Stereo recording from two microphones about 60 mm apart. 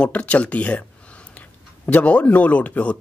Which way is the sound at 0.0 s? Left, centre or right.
Left.